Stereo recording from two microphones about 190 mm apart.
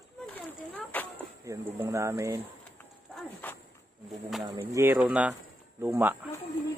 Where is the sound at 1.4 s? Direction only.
15° right (ahead or behind).